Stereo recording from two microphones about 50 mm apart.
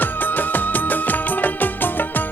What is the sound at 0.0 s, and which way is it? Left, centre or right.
Music, left.